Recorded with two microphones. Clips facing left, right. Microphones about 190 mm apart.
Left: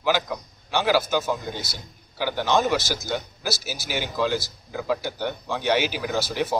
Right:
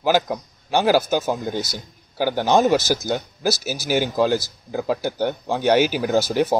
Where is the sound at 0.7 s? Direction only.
45° right (ahead or behind).